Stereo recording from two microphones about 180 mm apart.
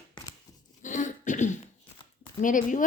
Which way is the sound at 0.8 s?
45° left (ahead or behind).